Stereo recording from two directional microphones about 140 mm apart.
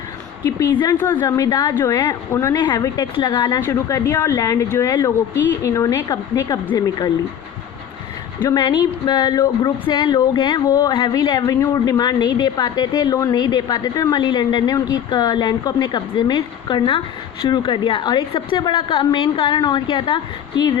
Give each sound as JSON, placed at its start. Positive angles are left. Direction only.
{"t": 0.9, "sound": "a woman's voice", "side_deg": 15}
{"t": 2.6, "sound": "a woman's voice", "side_deg": 35}
{"t": 8.4, "sound": "a woman's voice", "side_deg": 30}